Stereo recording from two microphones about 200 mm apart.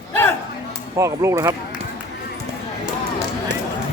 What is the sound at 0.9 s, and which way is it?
Speech, 15° right (ahead or behind).